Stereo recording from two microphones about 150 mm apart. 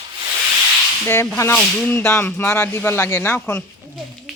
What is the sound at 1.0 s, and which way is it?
Speech, 15° left (ahead or behind).